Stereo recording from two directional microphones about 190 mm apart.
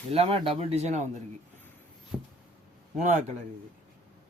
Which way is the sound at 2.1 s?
Centre (ahead or behind).